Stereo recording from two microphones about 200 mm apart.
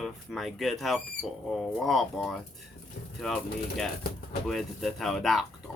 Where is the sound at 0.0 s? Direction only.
Centre (ahead or behind).